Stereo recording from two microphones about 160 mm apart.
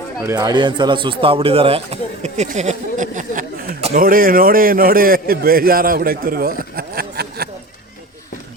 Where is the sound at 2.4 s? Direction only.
45° right (ahead or behind); by 3.7 s 60° right (ahead or behind).